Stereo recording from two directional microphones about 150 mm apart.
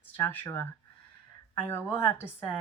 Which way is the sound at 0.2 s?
15° left (ahead or behind).